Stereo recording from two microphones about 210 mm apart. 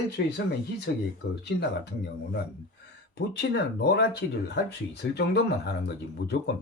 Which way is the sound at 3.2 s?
50° left (ahead or behind).